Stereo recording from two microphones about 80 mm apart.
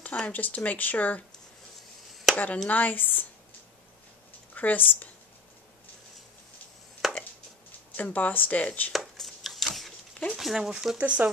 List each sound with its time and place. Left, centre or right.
0.0 s speech: centre
2.3 s a woman's voice: centre
4.6 s speech: left
7.0 s chopping: centre
7.9 s speech: left
8.9 s a sound: centre
10.3 s speech: centre